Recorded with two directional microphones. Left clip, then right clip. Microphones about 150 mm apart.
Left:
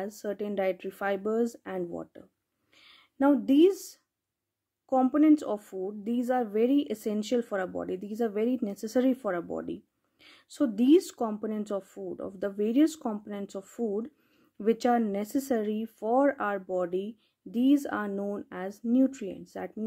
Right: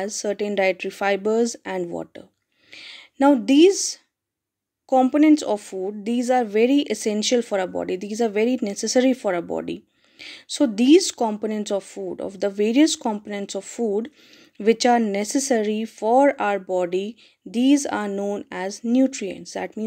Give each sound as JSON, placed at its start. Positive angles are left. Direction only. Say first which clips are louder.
{"t": 0.0, "sound": "speech", "louder": "right 9 dB", "side_deg": -5}
{"t": 2.8, "sound": "speech", "louder": "right 8 dB", "side_deg": -5}
{"t": 13.8, "sound": "speech", "louder": "right 8 dB", "side_deg": -15}
{"t": 14.6, "sound": "speech", "louder": "right 8 dB", "side_deg": -5}